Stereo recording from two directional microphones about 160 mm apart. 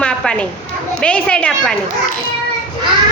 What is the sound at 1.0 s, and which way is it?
Speech, 5° left (ahead or behind).